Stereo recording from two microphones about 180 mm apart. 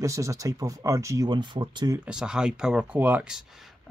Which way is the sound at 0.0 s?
15° right (ahead or behind).